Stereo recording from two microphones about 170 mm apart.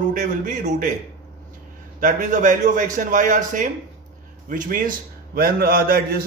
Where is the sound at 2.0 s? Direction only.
45° right (ahead or behind).